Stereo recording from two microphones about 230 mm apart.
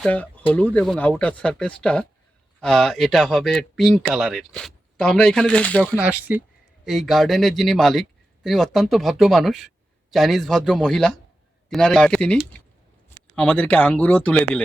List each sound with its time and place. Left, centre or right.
0.0 s speech: centre
5.9 s speech: centre